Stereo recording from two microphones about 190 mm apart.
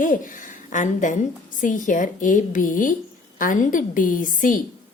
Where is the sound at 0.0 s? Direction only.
45° left (ahead or behind).